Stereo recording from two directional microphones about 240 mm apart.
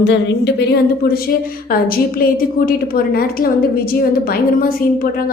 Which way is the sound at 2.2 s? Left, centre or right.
Left.